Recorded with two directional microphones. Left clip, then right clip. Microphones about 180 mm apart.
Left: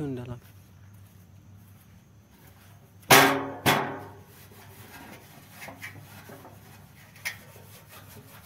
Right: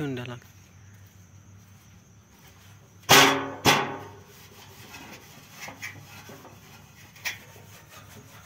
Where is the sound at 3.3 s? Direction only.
5° right (ahead or behind).